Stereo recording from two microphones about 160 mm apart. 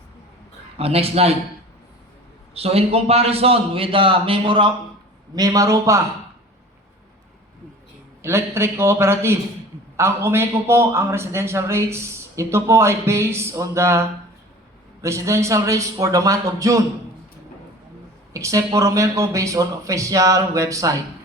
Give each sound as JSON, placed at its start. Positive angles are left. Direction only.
{"t": 0.8, "sound": "a man's voice", "side_deg": -40}
{"t": 2.6, "sound": "a man's voice", "side_deg": -40}
{"t": 8.2, "sound": "a man's voice", "side_deg": -15}
{"t": 15.0, "sound": "speech", "side_deg": -20}
{"t": 18.3, "sound": "speech", "side_deg": -20}